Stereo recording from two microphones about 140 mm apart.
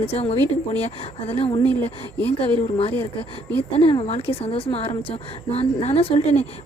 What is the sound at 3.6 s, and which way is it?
Speech, 45° left (ahead or behind).